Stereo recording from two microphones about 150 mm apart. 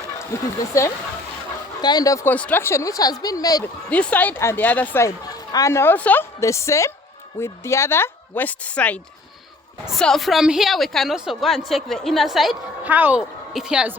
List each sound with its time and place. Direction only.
0.3 s speech: 20° left (ahead or behind)
2.3 s speech: 10° left (ahead or behind)
3.6 s a woman's voice: 10° left (ahead or behind); by 13.9 s 5° right (ahead or behind)